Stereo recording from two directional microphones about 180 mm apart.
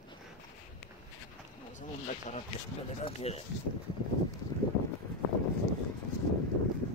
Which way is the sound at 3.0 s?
35° left (ahead or behind).